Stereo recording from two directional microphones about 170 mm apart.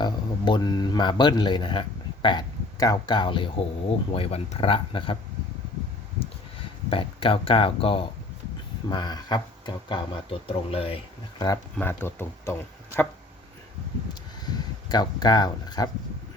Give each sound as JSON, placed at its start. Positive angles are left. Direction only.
{"t": 0.0, "sound": "speech", "side_deg": 25}
{"t": 6.6, "sound": "speech", "side_deg": 30}
{"t": 11.4, "sound": "speech", "side_deg": 15}
{"t": 14.8, "sound": "speech", "side_deg": 25}